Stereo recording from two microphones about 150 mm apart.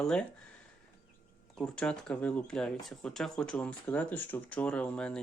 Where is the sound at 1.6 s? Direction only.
5° left (ahead or behind).